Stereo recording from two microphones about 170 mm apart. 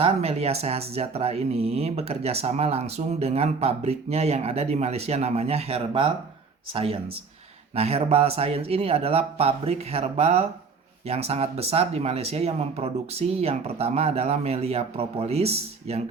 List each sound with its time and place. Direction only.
0.0 s speech: 35° right (ahead or behind)